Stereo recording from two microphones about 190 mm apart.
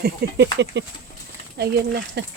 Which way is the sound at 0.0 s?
60° right (ahead or behind).